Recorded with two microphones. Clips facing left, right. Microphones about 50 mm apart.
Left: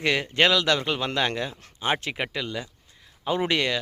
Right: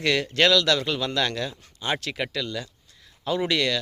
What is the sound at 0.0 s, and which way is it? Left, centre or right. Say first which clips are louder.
Speech: even; centre.